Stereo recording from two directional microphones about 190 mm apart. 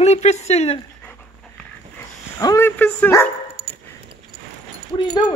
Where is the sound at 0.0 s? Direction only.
35° left (ahead or behind).